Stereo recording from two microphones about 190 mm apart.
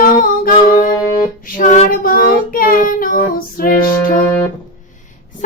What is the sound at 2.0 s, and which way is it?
Child singing, 50° left (ahead or behind).